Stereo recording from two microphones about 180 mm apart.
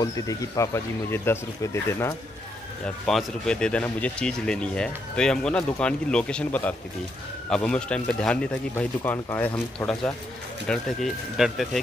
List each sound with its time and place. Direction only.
0.0 s speech: 15° left (ahead or behind)
3.1 s speech: 5° left (ahead or behind)